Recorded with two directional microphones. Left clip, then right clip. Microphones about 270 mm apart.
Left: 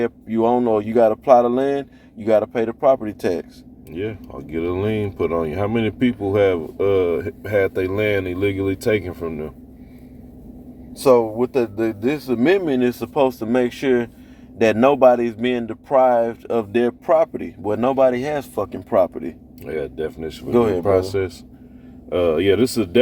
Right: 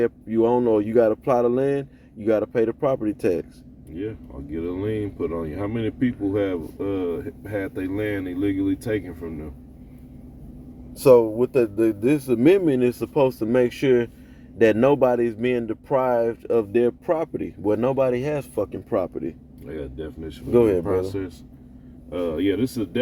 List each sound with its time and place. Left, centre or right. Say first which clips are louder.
0.3 s speech: left 3 dB; centre
4.5 s speech: left 5 dB; left
11.0 s speech: even; right
19.6 s speech: left 8 dB; left
20.5 s speech: even; right
20.8 s speech: left 7 dB; left